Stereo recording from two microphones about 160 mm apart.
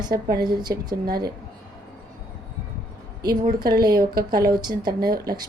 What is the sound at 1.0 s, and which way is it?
Speech, 70° right (ahead or behind).